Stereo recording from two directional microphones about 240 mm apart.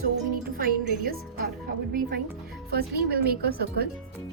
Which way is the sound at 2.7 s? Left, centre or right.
Right.